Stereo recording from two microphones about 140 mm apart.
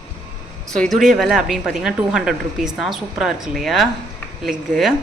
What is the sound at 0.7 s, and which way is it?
A woman's voice, centre (ahead or behind).